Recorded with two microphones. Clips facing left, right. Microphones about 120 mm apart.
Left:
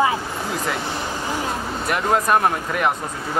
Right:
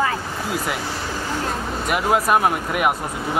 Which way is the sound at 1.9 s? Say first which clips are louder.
Even; 5° right (ahead or behind).